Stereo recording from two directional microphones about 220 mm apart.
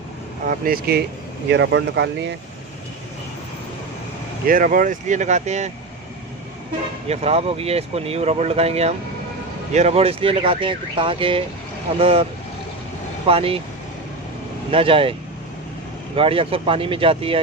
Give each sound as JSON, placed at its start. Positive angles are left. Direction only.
{"t": 0.6, "sound": "speech", "side_deg": -45}
{"t": 4.4, "sound": "speech", "side_deg": -40}
{"t": 7.1, "sound": "speech", "side_deg": -30}
{"t": 13.2, "sound": "speech", "side_deg": -25}
{"t": 14.7, "sound": "speech", "side_deg": -25}
{"t": 16.1, "sound": "speech", "side_deg": -25}